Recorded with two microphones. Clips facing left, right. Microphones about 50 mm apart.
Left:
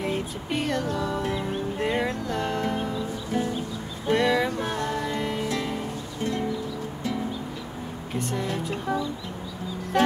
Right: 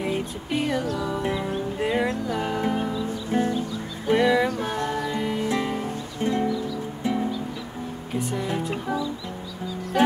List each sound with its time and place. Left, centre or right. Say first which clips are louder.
0.0 s music: right 1 dB; centre
3.3 s music: right 4 dB; right
4.1 s a sound: right 2 dB; centre
4.6 s music: right 1 dB; centre
5.5 s music: right 3 dB; centre
8.1 s music: right 2 dB; centre
9.9 s music: right 1 dB; centre